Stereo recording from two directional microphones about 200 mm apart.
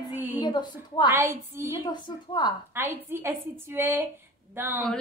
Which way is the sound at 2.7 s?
10° right (ahead or behind).